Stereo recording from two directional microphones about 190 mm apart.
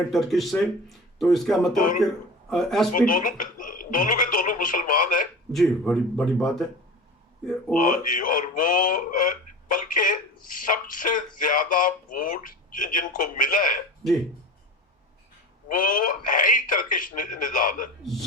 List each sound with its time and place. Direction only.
0.1 s speech: centre (ahead or behind)
1.7 s speech: 45° left (ahead or behind)
2.0 s speech: centre (ahead or behind)
3.1 s speech: 45° left (ahead or behind)
5.5 s speech: centre (ahead or behind)
7.8 s speech: 45° left (ahead or behind)
15.7 s speech: 45° left (ahead or behind)